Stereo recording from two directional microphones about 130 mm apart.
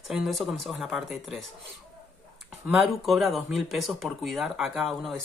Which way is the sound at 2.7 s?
Centre (ahead or behind).